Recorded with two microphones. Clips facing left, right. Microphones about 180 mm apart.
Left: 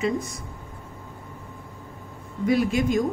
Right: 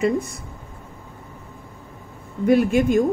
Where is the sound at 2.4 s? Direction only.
55° right (ahead or behind).